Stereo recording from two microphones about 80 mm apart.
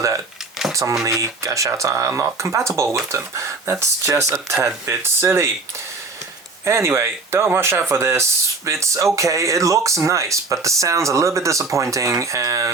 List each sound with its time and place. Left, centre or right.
0.7 s speech: right
6.7 s speech: right